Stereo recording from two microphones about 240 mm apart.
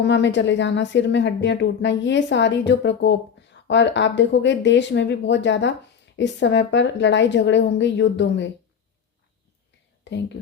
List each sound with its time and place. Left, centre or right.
0.0 s speech: left
10.0 s speech: left